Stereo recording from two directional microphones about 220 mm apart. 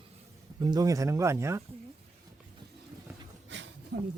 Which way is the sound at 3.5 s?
55° right (ahead or behind).